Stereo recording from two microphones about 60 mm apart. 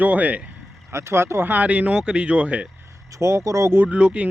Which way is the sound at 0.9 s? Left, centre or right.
Right.